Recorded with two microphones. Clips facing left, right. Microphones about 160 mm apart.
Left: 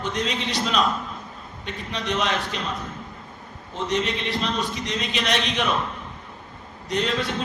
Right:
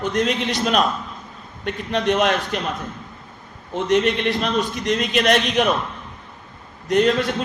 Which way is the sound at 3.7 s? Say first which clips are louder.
Right 7 dB; 60° right (ahead or behind).